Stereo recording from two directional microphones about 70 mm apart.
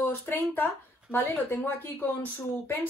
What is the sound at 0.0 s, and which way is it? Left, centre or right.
Speech, left.